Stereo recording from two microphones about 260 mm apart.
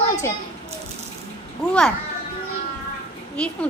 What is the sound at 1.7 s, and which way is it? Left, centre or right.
Speech, centre.